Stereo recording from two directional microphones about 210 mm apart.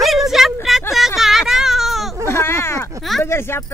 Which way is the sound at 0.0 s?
Centre (ahead or behind).